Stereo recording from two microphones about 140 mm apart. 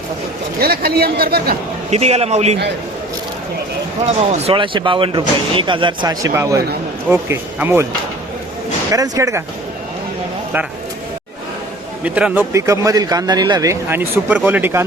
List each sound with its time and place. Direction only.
0.6 s a man's voice: 90° right
1.9 s a man's voice: 50° right (ahead or behind)
4.0 s a man's voice: 50° right (ahead or behind)
4.5 s speech: 35° right (ahead or behind); by 7.9 s 15° right (ahead or behind)
8.9 s speech: 25° right (ahead or behind)
12.0 s speech: 10° right (ahead or behind)
12.5 s speech: 20° right (ahead or behind)